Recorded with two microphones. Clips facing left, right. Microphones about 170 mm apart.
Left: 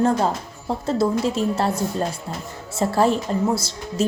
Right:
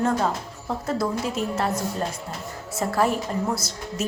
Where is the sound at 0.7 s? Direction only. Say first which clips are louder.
Left 5 dB; 25° left (ahead or behind).